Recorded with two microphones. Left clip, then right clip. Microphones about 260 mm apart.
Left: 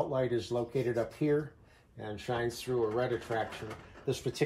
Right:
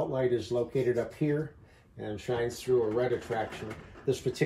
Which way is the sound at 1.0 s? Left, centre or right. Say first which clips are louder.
Left 1 dB; left.